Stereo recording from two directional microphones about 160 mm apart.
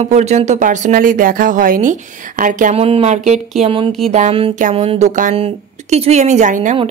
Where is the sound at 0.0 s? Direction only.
45° right (ahead or behind).